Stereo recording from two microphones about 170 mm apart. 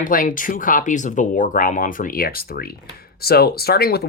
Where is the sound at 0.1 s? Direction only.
50° left (ahead or behind).